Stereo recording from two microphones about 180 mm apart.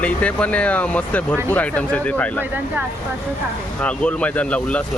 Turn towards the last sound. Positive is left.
turn(degrees=5)  # may be behind; listen again after turning